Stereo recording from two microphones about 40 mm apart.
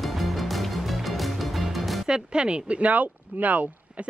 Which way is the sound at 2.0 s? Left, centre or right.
Right.